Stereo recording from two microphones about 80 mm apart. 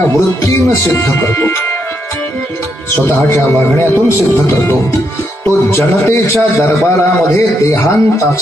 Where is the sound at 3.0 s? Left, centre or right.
Left.